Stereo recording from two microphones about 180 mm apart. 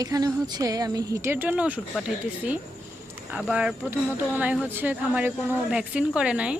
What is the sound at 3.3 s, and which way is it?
Speech, 5° right (ahead or behind).